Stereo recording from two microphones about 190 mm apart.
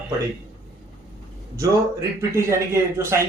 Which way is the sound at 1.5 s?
15° right (ahead or behind).